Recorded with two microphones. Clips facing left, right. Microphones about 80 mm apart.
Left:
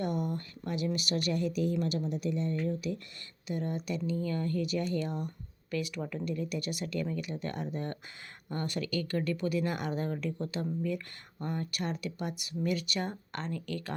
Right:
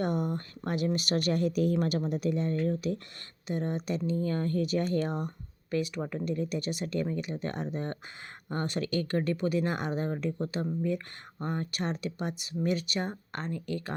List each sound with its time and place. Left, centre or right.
0.0 s a sound: right
0.6 s speech: right
3.4 s speech: right
5.7 s speech: right